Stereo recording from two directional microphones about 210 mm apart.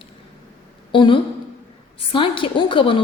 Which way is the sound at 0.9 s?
25° left (ahead or behind).